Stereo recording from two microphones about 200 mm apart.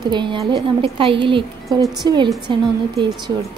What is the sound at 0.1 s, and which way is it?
A woman's voice, 25° right (ahead or behind).